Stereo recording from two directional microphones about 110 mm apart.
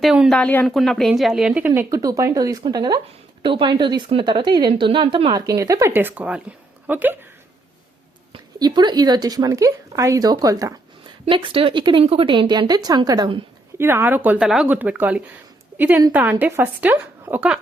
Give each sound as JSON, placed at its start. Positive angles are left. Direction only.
{"t": 0.0, "sound": "speech", "side_deg": -5}
{"t": 0.3, "sound": "speech", "side_deg": 10}
{"t": 1.9, "sound": "speech", "side_deg": -30}
{"t": 5.5, "sound": "speech", "side_deg": -30}
{"t": 5.9, "sound": "speech", "side_deg": -20}
{"t": 8.5, "sound": "speech", "side_deg": -40}
{"t": 11.3, "sound": "speech", "side_deg": -50}
{"t": 13.7, "sound": "speech", "side_deg": -20}
{"t": 14.4, "sound": "speech", "side_deg": -5}
{"t": 14.7, "sound": "a woman's voice", "side_deg": -15}